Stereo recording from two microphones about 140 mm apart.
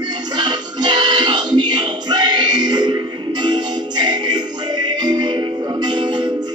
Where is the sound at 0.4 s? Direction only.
30° right (ahead or behind).